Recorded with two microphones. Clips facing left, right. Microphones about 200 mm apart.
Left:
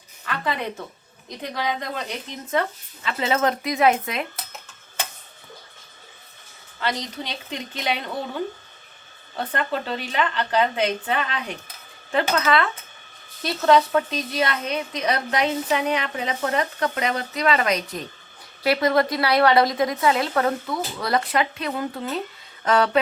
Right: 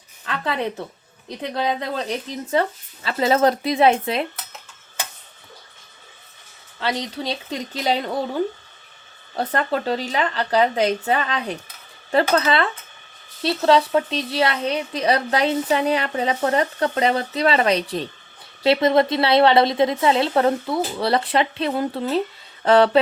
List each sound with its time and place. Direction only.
1.6 s speech: 30° right (ahead or behind)
6.7 s speech: 30° right (ahead or behind)
9.3 s a woman's voice: 40° right (ahead or behind)